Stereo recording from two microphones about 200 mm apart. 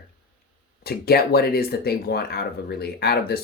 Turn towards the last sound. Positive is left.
turn(degrees=50)  # may be behind; listen again after turning